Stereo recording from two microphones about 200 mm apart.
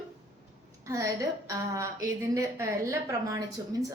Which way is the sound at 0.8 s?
15° right (ahead or behind).